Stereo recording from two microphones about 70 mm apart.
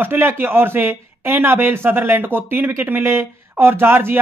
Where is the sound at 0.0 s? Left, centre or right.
Right.